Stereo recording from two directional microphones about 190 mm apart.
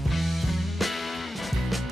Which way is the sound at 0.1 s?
Centre (ahead or behind).